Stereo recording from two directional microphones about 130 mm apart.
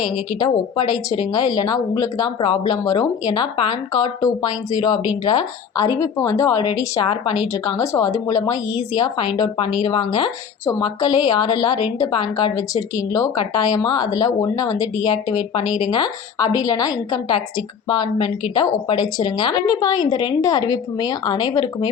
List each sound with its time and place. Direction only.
0.3 s a woman's voice: 35° left (ahead or behind)
9.3 s a woman's voice: 40° left (ahead or behind)